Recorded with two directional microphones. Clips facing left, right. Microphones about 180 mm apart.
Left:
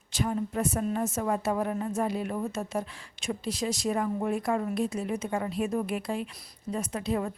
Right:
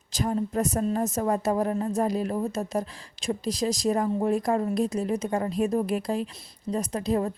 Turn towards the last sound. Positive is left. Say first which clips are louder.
# right 4 dB
turn(degrees=-35)  # may be behind; listen again after turning